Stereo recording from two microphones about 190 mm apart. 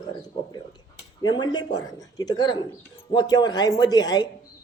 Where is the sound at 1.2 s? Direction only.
20° left (ahead or behind).